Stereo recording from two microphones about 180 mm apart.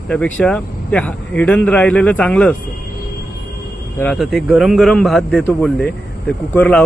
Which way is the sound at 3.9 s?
5° left (ahead or behind).